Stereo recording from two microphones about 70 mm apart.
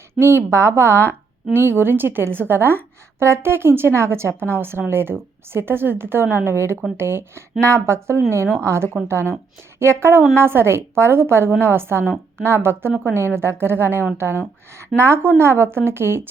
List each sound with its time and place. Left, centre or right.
0.1 s a woman's voice: right